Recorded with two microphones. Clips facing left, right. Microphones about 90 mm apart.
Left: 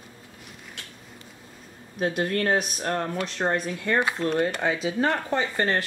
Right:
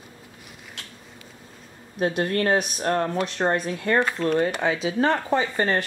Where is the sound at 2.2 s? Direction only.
40° right (ahead or behind).